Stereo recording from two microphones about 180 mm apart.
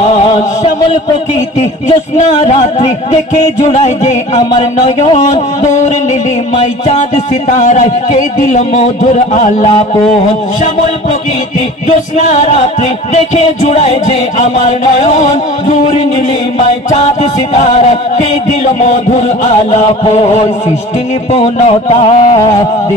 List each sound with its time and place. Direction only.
0.0 s a sound: 35° left (ahead or behind)
2.4 s music: 35° left (ahead or behind)
6.6 s music: 35° left (ahead or behind)
12.2 s music: 40° left (ahead or behind)
13.7 s music: 35° left (ahead or behind)
15.0 s music: 40° left (ahead or behind)
16.9 s music: 40° left (ahead or behind)